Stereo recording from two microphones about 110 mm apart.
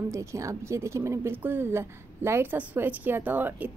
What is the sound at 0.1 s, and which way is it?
A woman's voice, 25° right (ahead or behind).